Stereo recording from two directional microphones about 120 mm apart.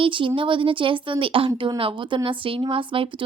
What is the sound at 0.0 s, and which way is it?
A woman's voice, 45° right (ahead or behind).